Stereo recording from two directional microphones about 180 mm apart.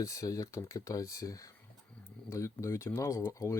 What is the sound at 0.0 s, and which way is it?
Speech, 20° left (ahead or behind).